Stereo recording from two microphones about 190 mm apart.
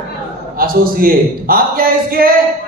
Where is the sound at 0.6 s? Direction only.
50° right (ahead or behind).